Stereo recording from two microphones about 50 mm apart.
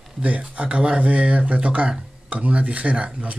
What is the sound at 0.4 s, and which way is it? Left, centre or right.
Speech, right.